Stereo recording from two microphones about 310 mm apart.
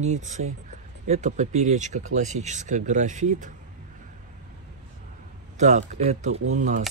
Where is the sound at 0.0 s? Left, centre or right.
Right.